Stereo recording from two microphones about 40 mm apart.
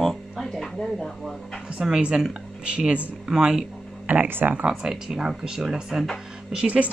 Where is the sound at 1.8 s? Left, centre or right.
Centre.